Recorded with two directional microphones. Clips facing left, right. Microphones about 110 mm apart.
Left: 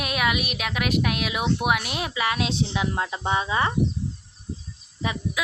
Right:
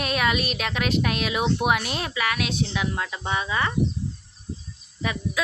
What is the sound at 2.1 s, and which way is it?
Speech, 25° left (ahead or behind).